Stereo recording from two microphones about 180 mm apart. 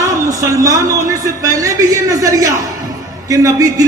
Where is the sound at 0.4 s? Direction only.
20° right (ahead or behind).